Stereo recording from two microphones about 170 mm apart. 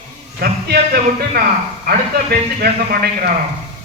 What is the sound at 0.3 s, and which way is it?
A man's voice, 60° right (ahead or behind).